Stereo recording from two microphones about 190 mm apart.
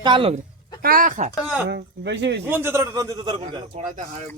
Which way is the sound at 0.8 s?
50° right (ahead or behind).